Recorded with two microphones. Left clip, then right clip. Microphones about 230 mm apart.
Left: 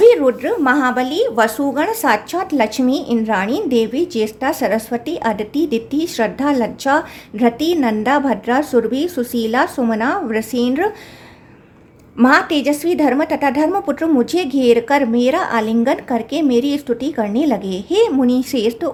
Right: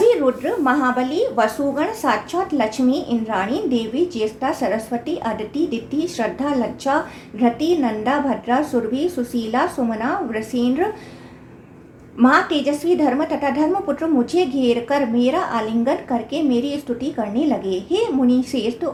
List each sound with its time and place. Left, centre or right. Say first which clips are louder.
0.1 s a woman's voice: left 4 dB; left
12.1 s a woman's voice: left 3 dB; left